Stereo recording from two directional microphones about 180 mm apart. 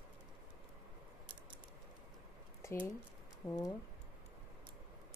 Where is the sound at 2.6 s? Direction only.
15° left (ahead or behind).